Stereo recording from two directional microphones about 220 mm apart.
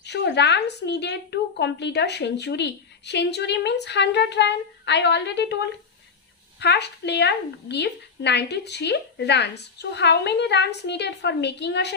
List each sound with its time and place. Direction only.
0.0 s a woman's voice: 50° left (ahead or behind)